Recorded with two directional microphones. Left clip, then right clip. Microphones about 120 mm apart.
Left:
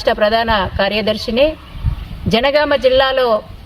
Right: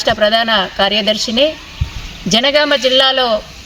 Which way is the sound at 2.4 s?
30° left (ahead or behind).